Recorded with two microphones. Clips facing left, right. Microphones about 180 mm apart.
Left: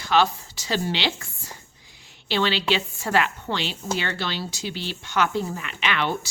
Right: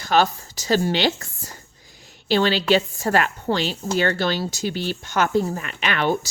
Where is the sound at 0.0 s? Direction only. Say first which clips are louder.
Right 2 dB; 45° right (ahead or behind).